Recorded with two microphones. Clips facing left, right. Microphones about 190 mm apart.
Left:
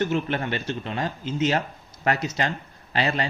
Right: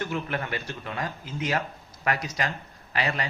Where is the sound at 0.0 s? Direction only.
25° left (ahead or behind).